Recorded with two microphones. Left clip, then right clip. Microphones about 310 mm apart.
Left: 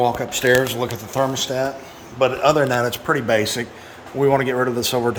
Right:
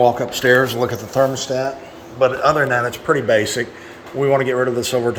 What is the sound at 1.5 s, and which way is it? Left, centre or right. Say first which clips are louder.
Speech: right 2 dB; centre.